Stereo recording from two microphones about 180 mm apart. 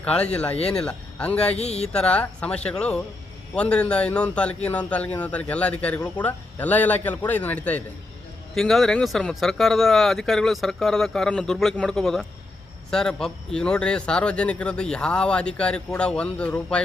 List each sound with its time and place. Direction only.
0.0 s speech: 5° left (ahead or behind)
1.5 s speech: 35° left (ahead or behind)
1.9 s a man's voice: 5° left (ahead or behind)